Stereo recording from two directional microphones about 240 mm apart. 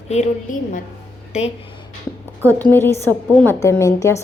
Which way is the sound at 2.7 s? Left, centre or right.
Centre.